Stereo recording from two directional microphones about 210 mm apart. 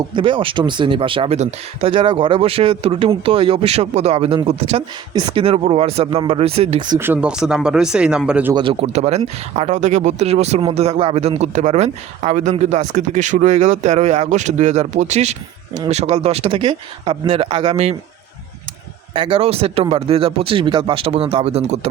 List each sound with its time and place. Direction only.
0.0 s speech: 25° right (ahead or behind); by 8.5 s 5° right (ahead or behind)
8.5 s speech: 25° right (ahead or behind)
19.1 s speech: 25° right (ahead or behind)